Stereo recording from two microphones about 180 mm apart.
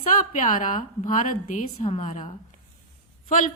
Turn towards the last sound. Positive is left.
turn(degrees=45)  # may be behind; listen again after turning